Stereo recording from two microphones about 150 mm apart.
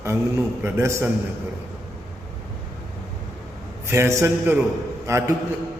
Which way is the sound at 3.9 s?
20° right (ahead or behind).